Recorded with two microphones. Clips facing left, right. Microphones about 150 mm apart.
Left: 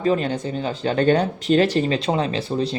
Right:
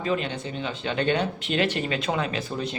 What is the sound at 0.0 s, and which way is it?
Speech, 40° left (ahead or behind).